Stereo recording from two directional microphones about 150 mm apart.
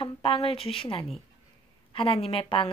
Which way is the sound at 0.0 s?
40° left (ahead or behind).